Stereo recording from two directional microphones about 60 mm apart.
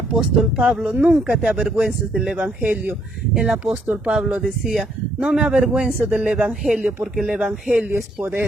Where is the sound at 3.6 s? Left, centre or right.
Right.